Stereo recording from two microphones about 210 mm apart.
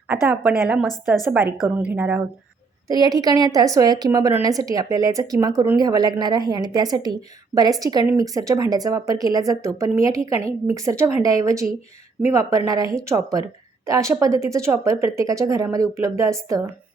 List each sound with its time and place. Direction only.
0.1 s a woman's voice: 5° right (ahead or behind)